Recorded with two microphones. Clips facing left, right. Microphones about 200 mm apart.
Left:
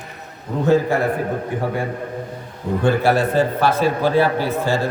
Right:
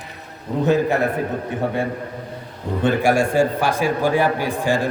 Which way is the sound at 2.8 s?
15° right (ahead or behind).